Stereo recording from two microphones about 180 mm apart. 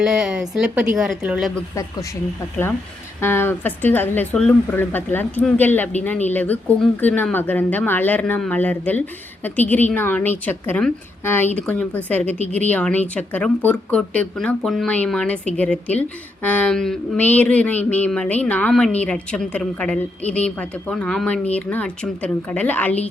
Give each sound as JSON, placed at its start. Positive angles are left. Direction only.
{"t": 0.0, "sound": "speech", "side_deg": -5}
{"t": 1.7, "sound": "speech", "side_deg": 20}
{"t": 3.2, "sound": "speech", "side_deg": 10}